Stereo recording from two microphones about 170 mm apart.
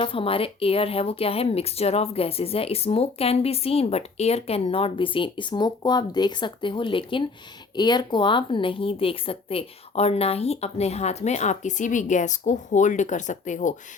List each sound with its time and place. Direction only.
0.0 s speech: 30° left (ahead or behind); by 13.7 s 45° left (ahead or behind)